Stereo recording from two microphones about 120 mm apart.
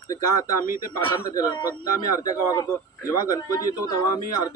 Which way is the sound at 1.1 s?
30° left (ahead or behind).